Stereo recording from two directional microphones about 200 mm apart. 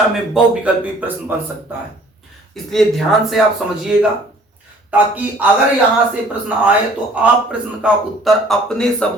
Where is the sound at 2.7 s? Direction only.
Centre (ahead or behind).